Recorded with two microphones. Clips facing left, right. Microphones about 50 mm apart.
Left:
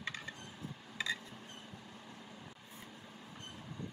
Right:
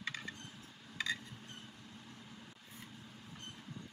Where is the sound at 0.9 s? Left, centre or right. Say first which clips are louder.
Even; centre.